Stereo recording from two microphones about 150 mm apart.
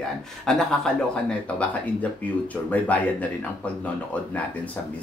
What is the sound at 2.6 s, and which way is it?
Speech, 10° left (ahead or behind).